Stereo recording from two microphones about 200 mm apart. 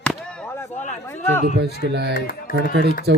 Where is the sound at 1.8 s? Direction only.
55° right (ahead or behind).